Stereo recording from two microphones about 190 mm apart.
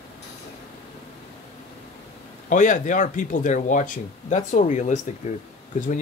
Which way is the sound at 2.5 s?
40° left (ahead or behind).